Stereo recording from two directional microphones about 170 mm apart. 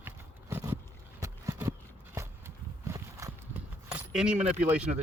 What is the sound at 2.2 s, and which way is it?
Walk, 15° right (ahead or behind).